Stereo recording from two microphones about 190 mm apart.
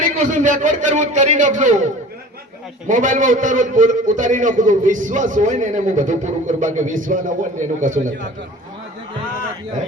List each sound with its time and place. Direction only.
0.0 s a man's voice: 40° right (ahead or behind)